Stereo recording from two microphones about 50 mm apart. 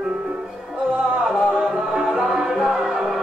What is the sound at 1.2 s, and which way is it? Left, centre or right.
Music, centre.